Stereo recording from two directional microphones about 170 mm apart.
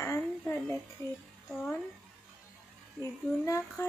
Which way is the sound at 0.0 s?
15° left (ahead or behind).